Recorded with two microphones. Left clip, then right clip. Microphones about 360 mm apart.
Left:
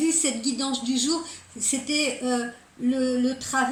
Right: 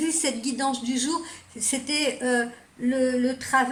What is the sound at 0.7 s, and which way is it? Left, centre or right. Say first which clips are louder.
Speech: left 2 dB; centre.